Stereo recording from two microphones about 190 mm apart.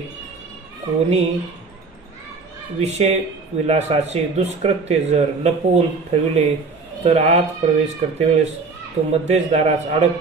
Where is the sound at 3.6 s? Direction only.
35° right (ahead or behind).